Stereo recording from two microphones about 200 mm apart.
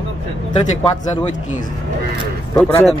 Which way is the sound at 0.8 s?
35° left (ahead or behind).